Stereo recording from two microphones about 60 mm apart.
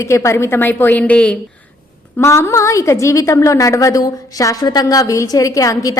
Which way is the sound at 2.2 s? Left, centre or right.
Left.